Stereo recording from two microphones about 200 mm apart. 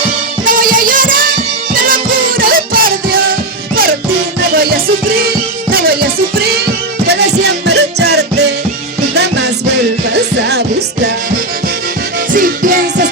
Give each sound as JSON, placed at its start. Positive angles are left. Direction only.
{"t": 0.4, "sound": "music", "side_deg": -45}
{"t": 4.5, "sound": "music", "side_deg": -50}
{"t": 10.2, "sound": "music", "side_deg": -60}
{"t": 12.3, "sound": "music", "side_deg": -40}